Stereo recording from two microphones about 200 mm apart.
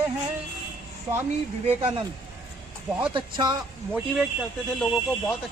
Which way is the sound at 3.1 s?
20° right (ahead or behind).